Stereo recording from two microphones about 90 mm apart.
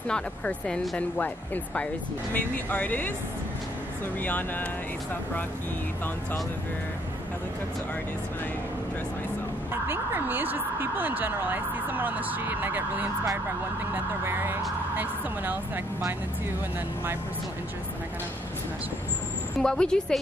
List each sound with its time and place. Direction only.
0.1 s speech: 10° left (ahead or behind)
4.2 s speech: 20° left (ahead or behind)
9.8 s speech: 25° right (ahead or behind)
19.6 s speech: 10° left (ahead or behind)